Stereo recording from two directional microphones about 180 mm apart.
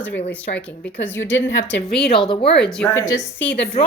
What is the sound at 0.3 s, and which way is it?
A woman's voice, 10° left (ahead or behind).